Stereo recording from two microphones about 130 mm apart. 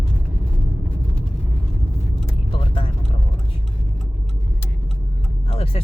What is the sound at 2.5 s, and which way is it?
Vehicle, 40° left (ahead or behind).